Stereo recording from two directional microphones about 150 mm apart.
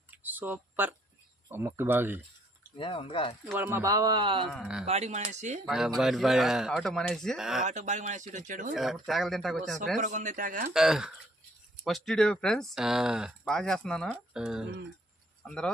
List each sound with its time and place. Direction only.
0.1 s a sound: 10° right (ahead or behind)
1.5 s speech: 15° right (ahead or behind)
2.7 s speech: 35° left (ahead or behind)
3.4 s speech: 15° right (ahead or behind); by 4.4 s 30° right (ahead or behind)
4.6 s speech: 5° right (ahead or behind)
4.9 s speech: 45° right (ahead or behind)
5.6 s speech: 5° right (ahead or behind)
7.7 s speech: 50° right (ahead or behind)
8.7 s speech: centre (ahead or behind)
10.0 s speech: 55° right (ahead or behind)
10.8 s speech: 5° right (ahead or behind)
14.4 s speech: 5° right (ahead or behind)